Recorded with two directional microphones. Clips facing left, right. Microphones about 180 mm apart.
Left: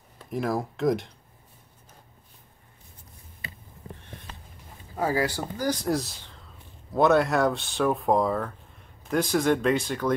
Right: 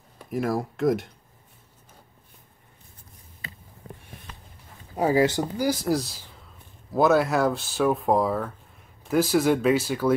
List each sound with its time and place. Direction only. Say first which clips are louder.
0.3 s speech: right 2 dB; centre (ahead or behind)
4.9 s speech: right 5 dB; 20° right (ahead or behind)
5.6 s speech: right 1 dB; 5° right (ahead or behind)